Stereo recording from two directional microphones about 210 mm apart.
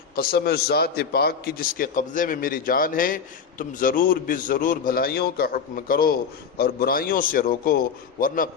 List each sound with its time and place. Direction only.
0.2 s a man's voice: 45° left (ahead or behind)